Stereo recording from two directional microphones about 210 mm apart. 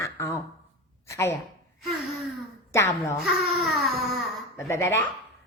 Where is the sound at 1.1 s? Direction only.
15° left (ahead or behind).